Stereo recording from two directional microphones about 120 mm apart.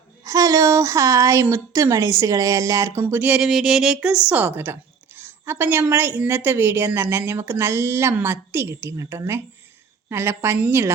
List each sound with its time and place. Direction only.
0.3 s a woman's voice: 30° right (ahead or behind)